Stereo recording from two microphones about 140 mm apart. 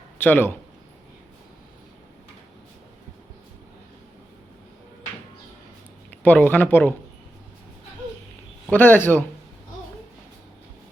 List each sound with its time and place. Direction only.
0.2 s speech: 15° left (ahead or behind)
6.2 s speech: 15° left (ahead or behind)
8.7 s speech: 15° left (ahead or behind)